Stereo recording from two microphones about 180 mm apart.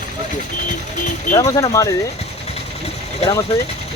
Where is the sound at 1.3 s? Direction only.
20° left (ahead or behind).